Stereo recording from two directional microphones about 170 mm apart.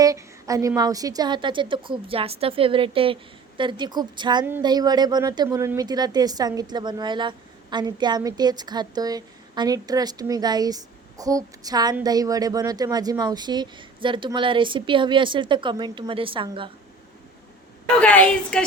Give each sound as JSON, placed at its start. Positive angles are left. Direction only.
{"t": 0.0, "sound": "a woman's voice", "side_deg": -20}
{"t": 18.0, "sound": "a woman's voice", "side_deg": 10}